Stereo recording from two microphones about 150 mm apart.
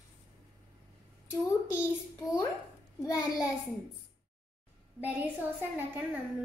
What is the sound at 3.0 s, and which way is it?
Speech, 25° left (ahead or behind).